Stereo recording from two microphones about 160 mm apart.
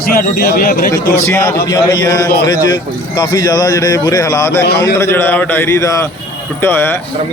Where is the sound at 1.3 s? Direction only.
15° left (ahead or behind).